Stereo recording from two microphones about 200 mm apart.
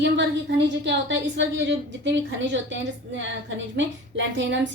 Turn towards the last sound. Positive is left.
turn(degrees=-65)  # may be behind; listen again after turning